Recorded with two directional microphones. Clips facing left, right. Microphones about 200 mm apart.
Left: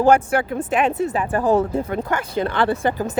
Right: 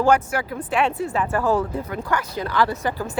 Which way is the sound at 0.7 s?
20° left (ahead or behind).